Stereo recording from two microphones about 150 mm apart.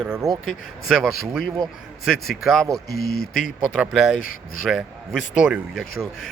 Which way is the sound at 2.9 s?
90° left.